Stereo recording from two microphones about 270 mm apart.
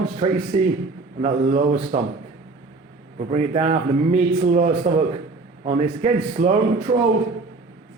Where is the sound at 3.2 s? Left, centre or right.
Right.